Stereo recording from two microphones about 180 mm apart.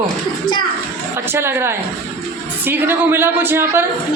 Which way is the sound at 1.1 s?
15° right (ahead or behind).